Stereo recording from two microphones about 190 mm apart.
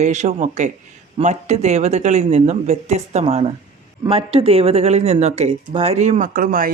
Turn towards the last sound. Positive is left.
turn(degrees=-45)  # may be behind; listen again after turning